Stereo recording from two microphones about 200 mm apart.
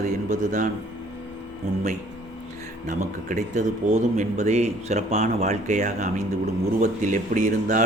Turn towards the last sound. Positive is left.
turn(degrees=-40)  # may be behind; listen again after turning